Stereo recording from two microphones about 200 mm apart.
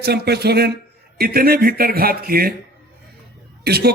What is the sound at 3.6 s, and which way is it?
Speech, 50° right (ahead or behind).